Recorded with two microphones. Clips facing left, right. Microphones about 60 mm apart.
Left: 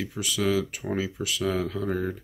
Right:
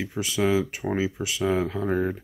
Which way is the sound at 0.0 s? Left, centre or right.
Right.